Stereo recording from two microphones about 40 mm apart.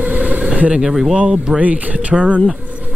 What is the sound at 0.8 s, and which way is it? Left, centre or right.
Speech, centre.